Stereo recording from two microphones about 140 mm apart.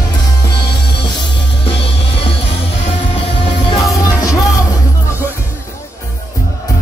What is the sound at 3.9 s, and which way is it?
Music, 25° left (ahead or behind).